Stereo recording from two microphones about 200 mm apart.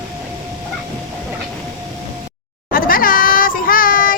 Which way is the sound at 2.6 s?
45° left (ahead or behind).